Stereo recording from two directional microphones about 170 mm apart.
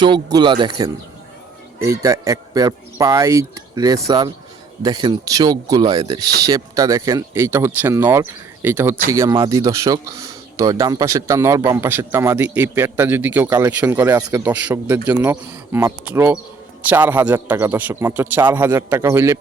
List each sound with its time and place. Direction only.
0.0 s a man's voice: 25° right (ahead or behind)
14.4 s a man's voice: 10° right (ahead or behind)